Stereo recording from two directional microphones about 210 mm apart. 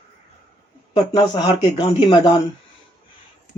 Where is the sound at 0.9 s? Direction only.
20° left (ahead or behind).